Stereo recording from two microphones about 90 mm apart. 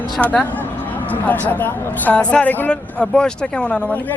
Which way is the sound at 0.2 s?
15° left (ahead or behind).